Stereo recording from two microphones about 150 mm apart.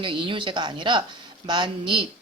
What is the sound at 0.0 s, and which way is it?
Speech, 35° right (ahead or behind).